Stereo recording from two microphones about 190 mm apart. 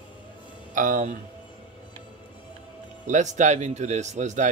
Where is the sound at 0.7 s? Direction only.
45° right (ahead or behind).